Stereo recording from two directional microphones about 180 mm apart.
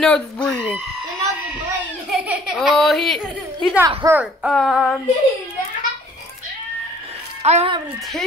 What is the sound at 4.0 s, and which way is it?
Speech, 10° right (ahead or behind).